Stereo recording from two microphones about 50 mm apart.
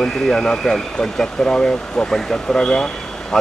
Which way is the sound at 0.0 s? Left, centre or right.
Centre.